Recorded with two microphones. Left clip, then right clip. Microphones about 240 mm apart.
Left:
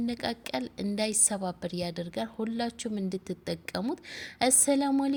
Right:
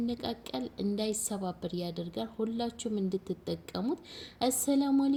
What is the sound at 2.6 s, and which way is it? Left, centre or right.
Speech, left.